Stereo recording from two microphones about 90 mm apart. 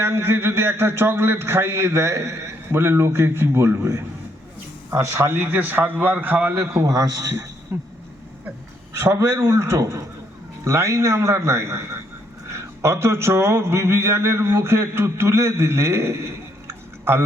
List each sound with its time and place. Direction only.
0.0 s a man's voice: 25° right (ahead or behind)
8.9 s a man's voice: 35° right (ahead or behind)